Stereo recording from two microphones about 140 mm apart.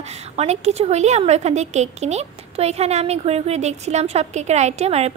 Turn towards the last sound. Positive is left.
turn(degrees=-50)  # may be behind; listen again after turning